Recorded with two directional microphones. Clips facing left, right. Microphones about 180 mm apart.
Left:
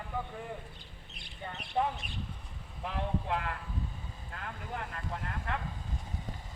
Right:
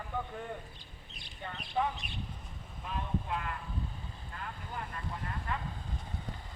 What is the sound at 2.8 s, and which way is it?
Vehicle, 75° left (ahead or behind).